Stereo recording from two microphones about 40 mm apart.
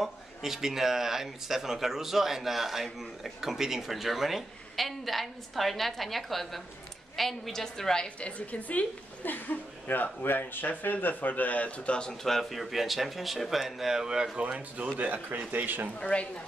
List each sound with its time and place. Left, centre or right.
0.0 s a woman's voice: centre
8.2 s a woman's voice: left
12.2 s speech: centre
14.4 s speech: right
16.0 s speech: left